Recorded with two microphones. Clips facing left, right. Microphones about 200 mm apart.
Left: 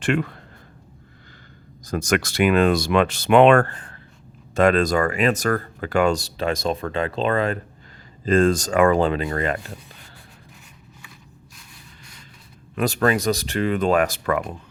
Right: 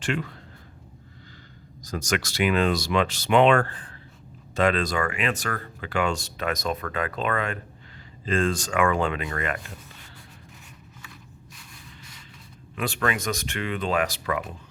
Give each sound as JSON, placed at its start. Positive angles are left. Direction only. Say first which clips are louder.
{"t": 0.0, "sound": "speech", "louder": "left 6 dB", "side_deg": 55}
{"t": 1.8, "sound": "speech", "louder": "left 6 dB", "side_deg": 55}
{"t": 12.7, "sound": "speech", "louder": "left 7 dB", "side_deg": 40}